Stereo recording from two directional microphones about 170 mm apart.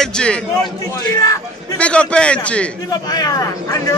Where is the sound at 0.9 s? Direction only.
20° left (ahead or behind).